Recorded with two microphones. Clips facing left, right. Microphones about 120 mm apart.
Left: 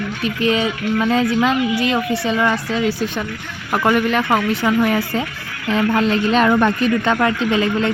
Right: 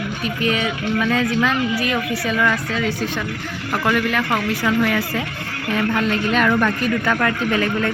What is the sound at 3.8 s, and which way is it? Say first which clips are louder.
Speech: left 4 dB; 30° left (ahead or behind).